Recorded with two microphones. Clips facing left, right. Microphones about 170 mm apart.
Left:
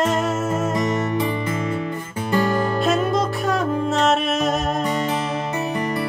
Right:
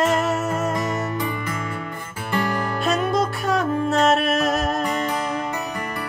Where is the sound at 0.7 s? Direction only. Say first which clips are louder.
Left 3 dB; 25° left (ahead or behind).